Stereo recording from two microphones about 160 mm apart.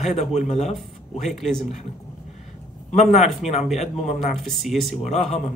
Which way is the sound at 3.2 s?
Centre (ahead or behind).